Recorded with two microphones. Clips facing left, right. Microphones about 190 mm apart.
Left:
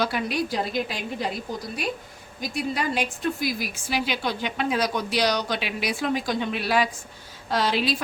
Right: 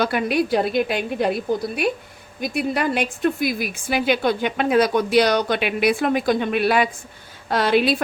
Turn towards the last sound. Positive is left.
turn(degrees=-60)  # may be behind; listen again after turning